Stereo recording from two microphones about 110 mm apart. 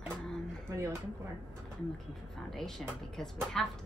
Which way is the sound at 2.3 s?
5° left (ahead or behind).